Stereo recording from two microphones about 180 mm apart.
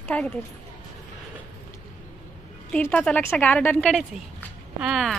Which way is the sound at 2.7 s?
10° left (ahead or behind).